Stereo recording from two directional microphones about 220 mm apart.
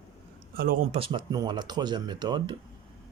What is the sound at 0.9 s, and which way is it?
Speech, 25° right (ahead or behind).